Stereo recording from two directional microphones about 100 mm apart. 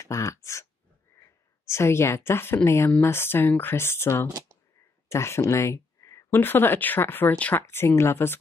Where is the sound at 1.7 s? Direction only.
25° left (ahead or behind).